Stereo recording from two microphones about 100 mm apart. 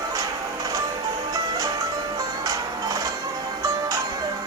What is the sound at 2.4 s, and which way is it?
Music, 40° right (ahead or behind).